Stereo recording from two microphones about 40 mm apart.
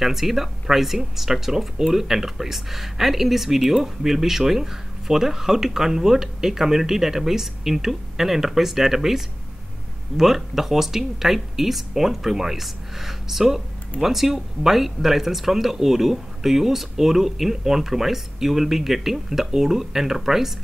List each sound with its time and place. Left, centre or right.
0.0 s speech: centre